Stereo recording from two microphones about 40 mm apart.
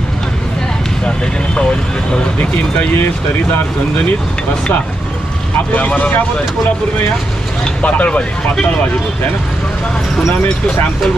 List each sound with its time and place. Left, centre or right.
1.0 s speech: left
5.9 s speech: left
7.8 s speech: left